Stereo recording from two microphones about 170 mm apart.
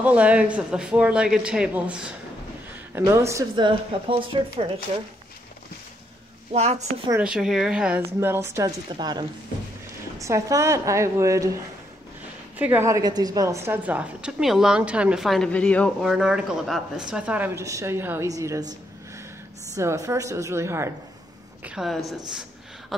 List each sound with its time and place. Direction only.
0.0 s a man's voice: 10° right (ahead or behind)
3.1 s a woman's voice: 15° right (ahead or behind)
6.5 s a woman's voice: 40° right (ahead or behind)
7.1 s a woman's voice: 10° right (ahead or behind)
12.5 s a woman's voice: 10° right (ahead or behind)
19.7 s a man's voice: 20° right (ahead or behind)
21.6 s a woman's voice: 5° right (ahead or behind)
22.3 s a sound: 5° right (ahead or behind)